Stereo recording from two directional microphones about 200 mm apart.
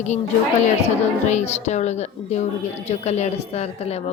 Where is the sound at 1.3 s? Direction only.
35° left (ahead or behind).